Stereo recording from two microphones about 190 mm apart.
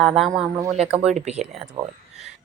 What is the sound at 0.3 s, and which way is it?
Speech, 20° right (ahead or behind).